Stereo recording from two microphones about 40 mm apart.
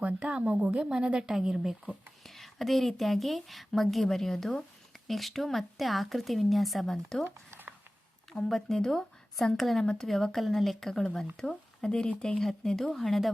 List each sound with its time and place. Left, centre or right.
0.0 s a woman's voice: right
1.3 s speech: centre
2.0 s speech: centre
8.3 s speech: centre
9.6 s speech: centre; by 12.0 s left
12.4 s speech: centre